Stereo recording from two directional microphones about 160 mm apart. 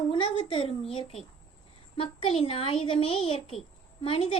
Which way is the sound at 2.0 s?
35° left (ahead or behind).